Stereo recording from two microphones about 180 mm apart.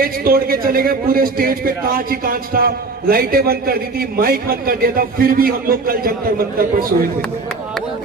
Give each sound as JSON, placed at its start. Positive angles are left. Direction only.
{"t": 0.0, "sound": "a man's voice", "side_deg": -55}